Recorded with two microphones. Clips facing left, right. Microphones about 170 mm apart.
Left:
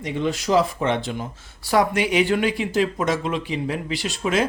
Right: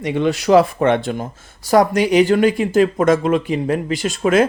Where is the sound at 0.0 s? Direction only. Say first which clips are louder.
Right 6 dB; 70° right (ahead or behind).